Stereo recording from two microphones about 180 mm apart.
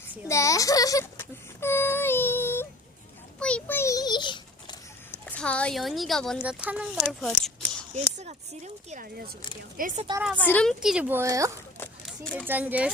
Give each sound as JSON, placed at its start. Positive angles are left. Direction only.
{"t": 0.3, "sound": "a sound", "side_deg": 15}
{"t": 3.4, "sound": "a child's voice", "side_deg": 10}
{"t": 5.2, "sound": "speech", "side_deg": 10}
{"t": 7.1, "sound": "a sound", "side_deg": 0}
{"t": 7.9, "sound": "a woman's voice", "side_deg": -40}
{"t": 10.3, "sound": "speech", "side_deg": 10}
{"t": 11.2, "sound": "speech", "side_deg": -15}
{"t": 12.0, "sound": "speech", "side_deg": 5}
{"t": 12.5, "sound": "speech", "side_deg": -10}